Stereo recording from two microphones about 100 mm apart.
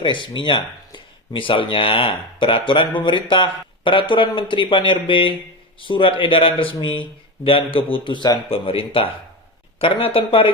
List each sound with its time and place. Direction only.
0.0 s speech: 55° left (ahead or behind)